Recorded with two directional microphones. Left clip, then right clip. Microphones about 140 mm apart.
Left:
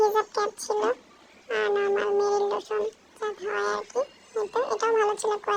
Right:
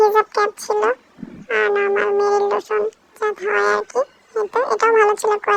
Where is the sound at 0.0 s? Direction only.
30° right (ahead or behind).